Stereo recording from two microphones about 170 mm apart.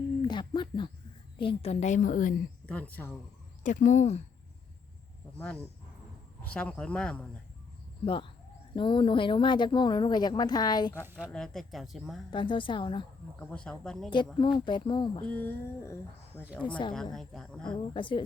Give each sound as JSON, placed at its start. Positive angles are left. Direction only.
{"t": 0.2, "sound": "a sound", "side_deg": 25}
{"t": 1.4, "sound": "a woman's voice", "side_deg": 35}
{"t": 2.6, "sound": "speech", "side_deg": 10}
{"t": 3.6, "sound": "a woman's voice", "side_deg": 45}
{"t": 6.4, "sound": "speech", "side_deg": 5}
{"t": 8.0, "sound": "speech", "side_deg": 30}
{"t": 11.3, "sound": "speech", "side_deg": 5}
{"t": 12.3, "sound": "speech", "side_deg": 30}
{"t": 13.4, "sound": "speech", "side_deg": 5}
{"t": 14.6, "sound": "speech", "side_deg": 30}
{"t": 15.3, "sound": "speech", "side_deg": 10}
{"t": 16.6, "sound": "speech", "side_deg": 30}
{"t": 16.9, "sound": "speech", "side_deg": 0}
{"t": 17.7, "sound": "speech", "side_deg": 30}